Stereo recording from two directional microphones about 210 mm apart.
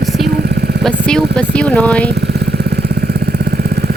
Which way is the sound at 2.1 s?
50° right (ahead or behind).